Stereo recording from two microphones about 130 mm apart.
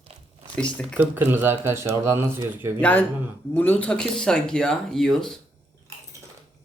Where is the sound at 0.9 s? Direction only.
15° right (ahead or behind).